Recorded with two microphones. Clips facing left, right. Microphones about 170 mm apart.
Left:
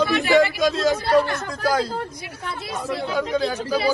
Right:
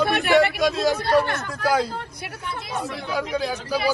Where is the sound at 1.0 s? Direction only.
60° right (ahead or behind).